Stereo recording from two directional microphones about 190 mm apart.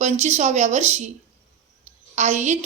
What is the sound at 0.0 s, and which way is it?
A woman's voice, 35° right (ahead or behind).